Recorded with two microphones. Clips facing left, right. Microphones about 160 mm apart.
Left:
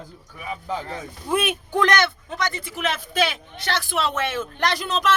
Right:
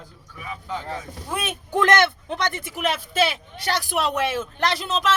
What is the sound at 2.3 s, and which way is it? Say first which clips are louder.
Speech: right 1 dB; 15° right (ahead or behind).